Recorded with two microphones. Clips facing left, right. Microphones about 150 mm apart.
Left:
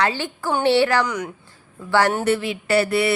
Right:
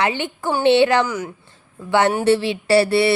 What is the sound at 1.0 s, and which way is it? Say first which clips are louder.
Speech: right 1 dB; 5° right (ahead or behind).